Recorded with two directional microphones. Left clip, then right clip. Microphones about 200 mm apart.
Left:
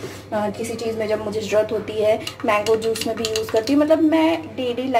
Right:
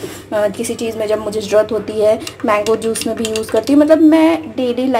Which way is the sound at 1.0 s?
25° right (ahead or behind).